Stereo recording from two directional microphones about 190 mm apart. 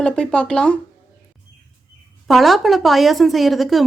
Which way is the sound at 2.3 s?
Centre (ahead or behind).